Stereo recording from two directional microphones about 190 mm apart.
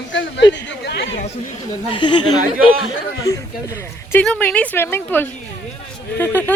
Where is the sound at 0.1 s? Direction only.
70° left (ahead or behind).